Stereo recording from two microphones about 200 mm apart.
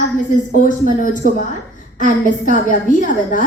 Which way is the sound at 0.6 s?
40° left (ahead or behind).